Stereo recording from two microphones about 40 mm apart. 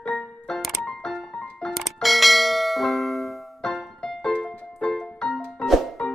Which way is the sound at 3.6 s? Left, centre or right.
Centre.